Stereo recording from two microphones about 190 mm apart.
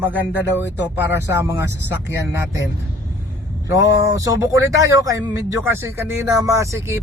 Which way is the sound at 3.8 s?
80° left.